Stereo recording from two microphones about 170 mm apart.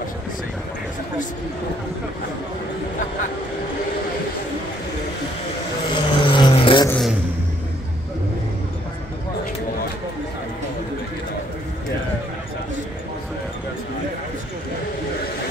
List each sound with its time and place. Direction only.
5.9 s vehicle: 30° left (ahead or behind)